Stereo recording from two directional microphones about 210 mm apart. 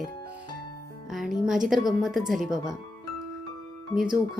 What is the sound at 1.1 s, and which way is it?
Speech, centre (ahead or behind).